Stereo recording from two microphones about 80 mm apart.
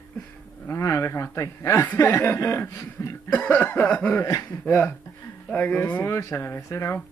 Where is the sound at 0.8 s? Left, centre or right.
Left.